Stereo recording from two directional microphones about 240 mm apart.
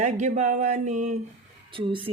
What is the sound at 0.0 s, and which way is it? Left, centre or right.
A woman's voice, right.